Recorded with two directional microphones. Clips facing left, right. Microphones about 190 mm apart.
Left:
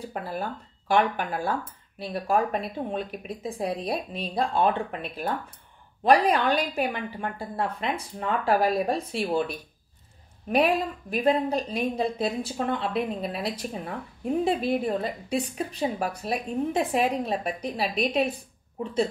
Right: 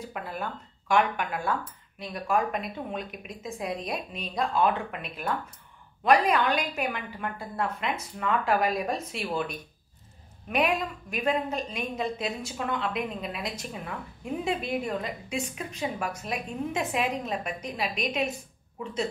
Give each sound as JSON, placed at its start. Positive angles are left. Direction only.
{"t": 0.0, "sound": "a woman's voice", "side_deg": 35}